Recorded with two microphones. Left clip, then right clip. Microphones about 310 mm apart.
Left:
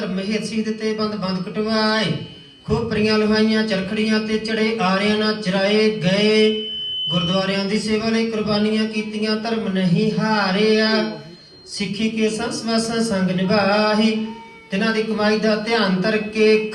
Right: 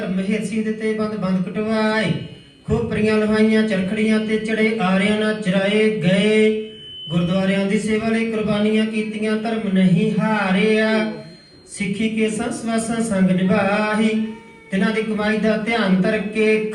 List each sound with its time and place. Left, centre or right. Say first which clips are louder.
0.3 s a man's voice: right 1 dB; left
10.2 s a man's voice: left 2 dB; left
12.4 s a man's voice: left 1 dB; left